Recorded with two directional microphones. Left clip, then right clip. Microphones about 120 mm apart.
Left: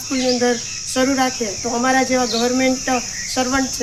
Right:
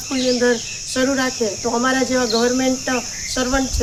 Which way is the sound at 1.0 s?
20° right (ahead or behind).